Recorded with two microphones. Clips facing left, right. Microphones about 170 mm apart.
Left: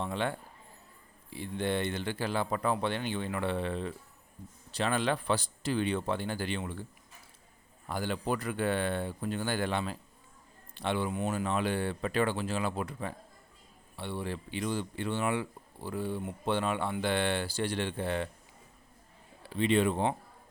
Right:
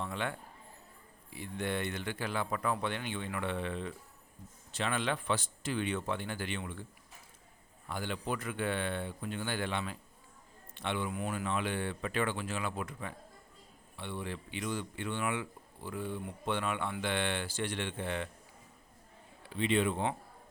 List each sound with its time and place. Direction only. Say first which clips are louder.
0.0 s speech: left 4 dB; 30° left (ahead or behind)
7.9 s speech: left 4 dB; 40° left (ahead or behind)
19.4 s speech: left 3 dB; 35° left (ahead or behind)